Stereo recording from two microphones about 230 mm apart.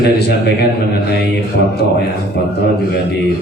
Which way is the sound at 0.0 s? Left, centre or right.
Left.